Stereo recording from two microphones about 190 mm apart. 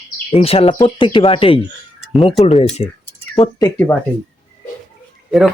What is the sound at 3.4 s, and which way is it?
Speech, 20° left (ahead or behind).